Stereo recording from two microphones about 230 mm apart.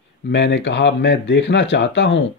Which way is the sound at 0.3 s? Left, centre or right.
Left.